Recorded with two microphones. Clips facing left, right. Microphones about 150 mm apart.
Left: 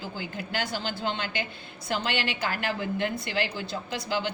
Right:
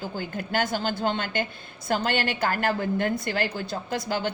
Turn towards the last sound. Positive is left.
turn(degrees=-50)  # may be behind; listen again after turning